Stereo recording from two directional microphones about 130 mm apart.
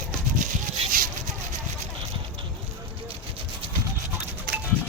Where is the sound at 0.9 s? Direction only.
90° right.